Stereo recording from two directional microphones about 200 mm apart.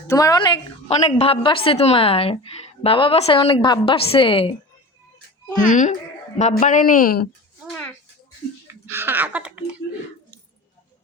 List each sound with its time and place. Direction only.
0.1 s a woman's voice: 20° left (ahead or behind)
5.6 s speech: 40° left (ahead or behind)
7.7 s a sound: 10° left (ahead or behind)
8.6 s speech: 10° right (ahead or behind)